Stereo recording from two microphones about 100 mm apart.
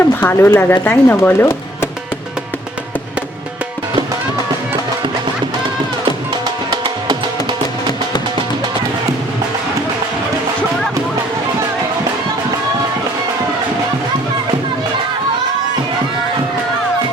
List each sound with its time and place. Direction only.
0.0 s speech: 20° left (ahead or behind)
6.7 s music: 50° right (ahead or behind)